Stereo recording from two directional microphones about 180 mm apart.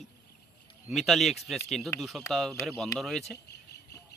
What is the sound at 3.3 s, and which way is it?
Cricket, 65° left (ahead or behind).